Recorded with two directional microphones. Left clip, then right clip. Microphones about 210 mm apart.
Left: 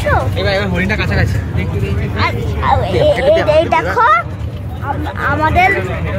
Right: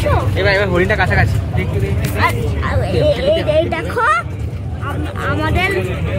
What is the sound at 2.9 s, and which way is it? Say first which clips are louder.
Speech: even; 40° left (ahead or behind).